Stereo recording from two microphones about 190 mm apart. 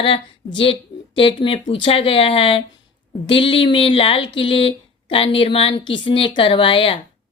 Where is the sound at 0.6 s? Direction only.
25° left (ahead or behind).